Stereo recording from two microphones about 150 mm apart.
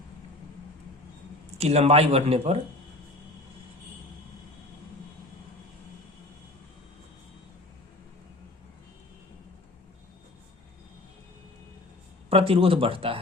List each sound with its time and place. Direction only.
1.5 s a man's voice: 45° right (ahead or behind)
12.3 s speech: 40° right (ahead or behind)